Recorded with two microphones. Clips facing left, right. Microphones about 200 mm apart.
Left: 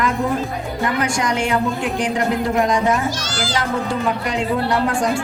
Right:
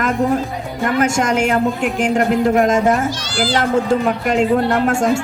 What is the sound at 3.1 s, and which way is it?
Speech, 45° left (ahead or behind).